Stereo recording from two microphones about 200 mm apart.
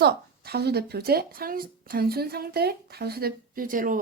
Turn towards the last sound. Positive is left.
turn(degrees=-45)  # may be behind; listen again after turning